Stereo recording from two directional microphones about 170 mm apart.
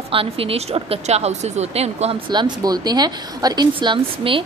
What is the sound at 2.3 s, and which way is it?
Speech, 25° right (ahead or behind).